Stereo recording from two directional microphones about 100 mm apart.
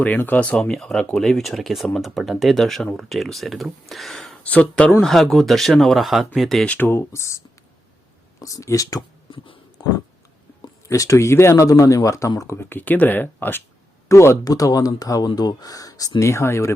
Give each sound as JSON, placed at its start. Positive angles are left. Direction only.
{"t": 0.0, "sound": "speech", "side_deg": 15}
{"t": 6.7, "sound": "speech", "side_deg": 20}
{"t": 9.3, "sound": "a sound", "side_deg": 60}
{"t": 10.8, "sound": "speech", "side_deg": 35}
{"t": 12.6, "sound": "speech", "side_deg": 20}